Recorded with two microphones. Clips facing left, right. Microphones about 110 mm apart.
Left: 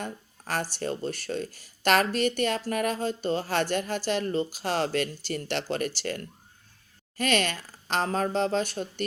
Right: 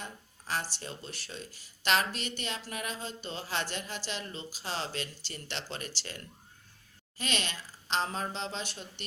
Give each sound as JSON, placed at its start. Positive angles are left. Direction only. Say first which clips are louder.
{"t": 0.0, "sound": "speech", "louder": "left 8 dB", "side_deg": 50}